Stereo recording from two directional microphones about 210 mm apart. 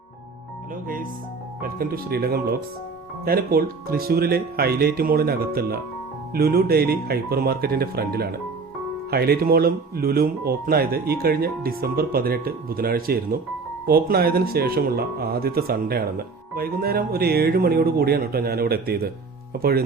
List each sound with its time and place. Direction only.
1.6 s speech: 45° right (ahead or behind)